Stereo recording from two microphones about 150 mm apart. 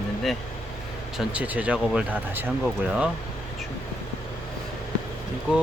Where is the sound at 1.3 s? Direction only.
10° right (ahead or behind).